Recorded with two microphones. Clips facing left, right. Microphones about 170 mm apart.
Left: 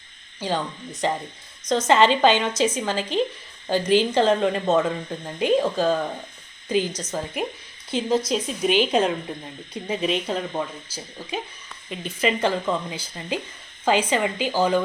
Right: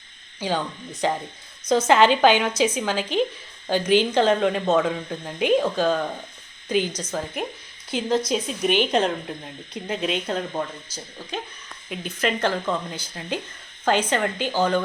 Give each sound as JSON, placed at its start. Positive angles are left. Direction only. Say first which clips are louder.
{"t": 0.3, "sound": "speech", "louder": "even", "side_deg": 0}